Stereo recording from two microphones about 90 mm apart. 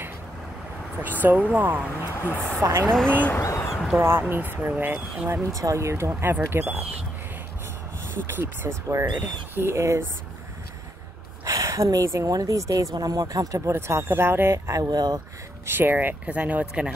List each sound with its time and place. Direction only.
1.2 s speech: 15° right (ahead or behind)
2.1 s speech: 25° left (ahead or behind)
2.6 s speech: 25° right (ahead or behind)
3.3 s a sound: 30° left (ahead or behind)
3.7 s a sound: centre (ahead or behind)
4.0 s speech: 25° right (ahead or behind)
5.3 s speech: 35° right (ahead or behind)
8.3 s speech: 25° right (ahead or behind)
8.8 s speech: 35° right (ahead or behind)
11.4 s speech: 40° right (ahead or behind)
13.7 s speech: 30° right (ahead or behind)
15.6 s speech: 25° right (ahead or behind)